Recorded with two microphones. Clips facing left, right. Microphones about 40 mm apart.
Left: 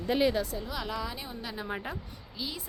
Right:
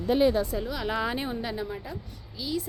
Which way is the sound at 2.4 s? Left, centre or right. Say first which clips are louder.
Right 7 dB; centre.